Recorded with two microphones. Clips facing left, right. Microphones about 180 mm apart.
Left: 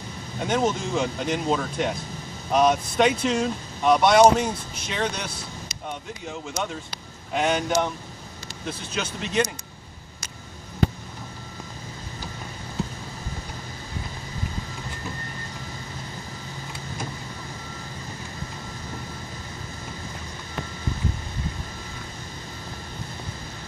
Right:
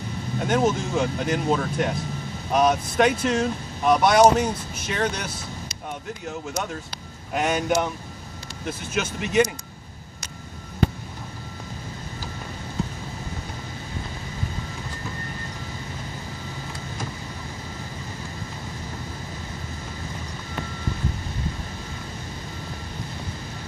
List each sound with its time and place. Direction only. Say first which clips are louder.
0.4 s speech: right 2 dB; centre (ahead or behind)
9.2 s speech: right 4 dB; 10° right (ahead or behind)